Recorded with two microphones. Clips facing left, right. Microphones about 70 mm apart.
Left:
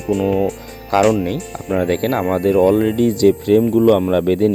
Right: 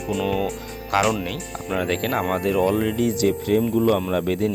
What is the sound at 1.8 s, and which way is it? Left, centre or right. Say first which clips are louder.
Speech: left 6 dB; left.